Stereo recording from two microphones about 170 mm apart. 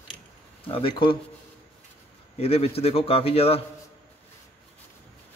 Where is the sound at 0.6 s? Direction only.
35° left (ahead or behind).